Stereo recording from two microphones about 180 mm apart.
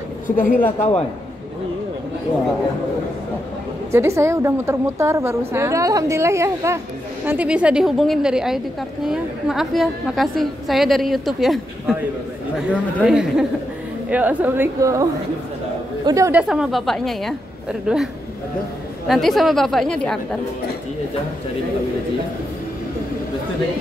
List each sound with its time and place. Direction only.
0.7 s a man's voice: 35° left (ahead or behind)
3.9 s a woman's voice: 15° right (ahead or behind)
16.1 s a woman's voice: 15° right (ahead or behind)
16.3 s a woman's voice: 5° right (ahead or behind)
19.0 s a woman's voice: centre (ahead or behind)